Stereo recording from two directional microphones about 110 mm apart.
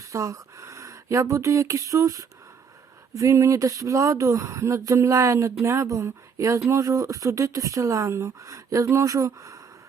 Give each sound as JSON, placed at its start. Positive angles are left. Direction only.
{"t": 0.1, "sound": "speech", "side_deg": -30}